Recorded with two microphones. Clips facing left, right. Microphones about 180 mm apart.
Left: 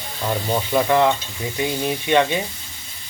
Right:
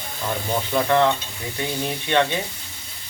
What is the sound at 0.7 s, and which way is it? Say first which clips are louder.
Speech: left 1 dB; 10° left (ahead or behind).